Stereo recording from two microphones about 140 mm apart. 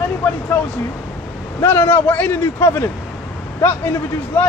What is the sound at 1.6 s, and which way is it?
A man's voice, 15° left (ahead or behind).